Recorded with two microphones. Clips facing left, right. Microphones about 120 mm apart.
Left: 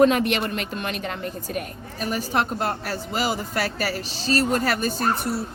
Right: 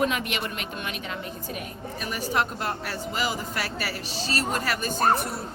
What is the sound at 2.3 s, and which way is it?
A woman's voice, 30° left (ahead or behind).